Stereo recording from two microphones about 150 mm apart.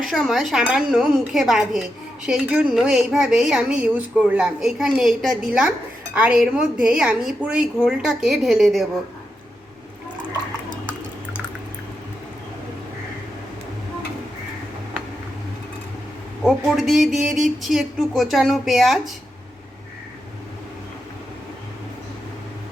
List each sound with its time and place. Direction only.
0.0 s speech: centre (ahead or behind)
16.4 s speech: 5° right (ahead or behind)